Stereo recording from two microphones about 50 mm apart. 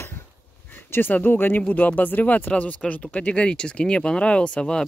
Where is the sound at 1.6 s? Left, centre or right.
Left.